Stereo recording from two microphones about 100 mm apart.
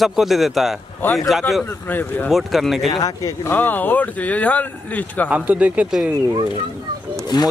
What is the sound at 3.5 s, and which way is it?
Speech, 15° left (ahead or behind).